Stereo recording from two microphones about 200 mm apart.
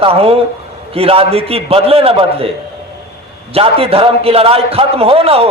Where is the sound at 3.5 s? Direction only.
30° right (ahead or behind).